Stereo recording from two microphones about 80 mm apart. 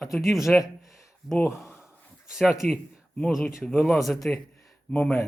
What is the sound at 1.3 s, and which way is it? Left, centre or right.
Speech, left.